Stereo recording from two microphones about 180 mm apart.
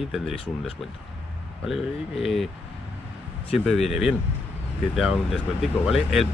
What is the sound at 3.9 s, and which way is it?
Speech, centre (ahead or behind).